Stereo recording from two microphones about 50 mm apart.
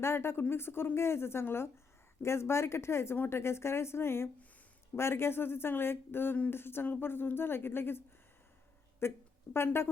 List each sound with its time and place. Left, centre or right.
0.0 s a woman's voice: left